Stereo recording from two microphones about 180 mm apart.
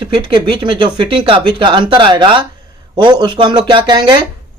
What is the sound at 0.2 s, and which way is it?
Speech, 25° right (ahead or behind).